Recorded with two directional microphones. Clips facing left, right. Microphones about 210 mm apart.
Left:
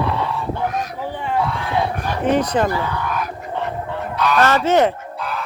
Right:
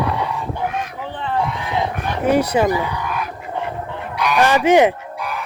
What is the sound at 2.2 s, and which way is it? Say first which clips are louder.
Speech: right 2 dB; 10° right (ahead or behind).